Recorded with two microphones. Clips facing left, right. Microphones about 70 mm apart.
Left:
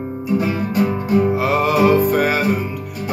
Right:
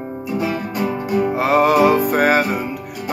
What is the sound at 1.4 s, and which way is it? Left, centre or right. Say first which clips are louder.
Music: right 2 dB; right.